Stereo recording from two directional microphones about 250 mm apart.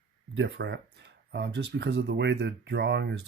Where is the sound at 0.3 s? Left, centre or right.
Right.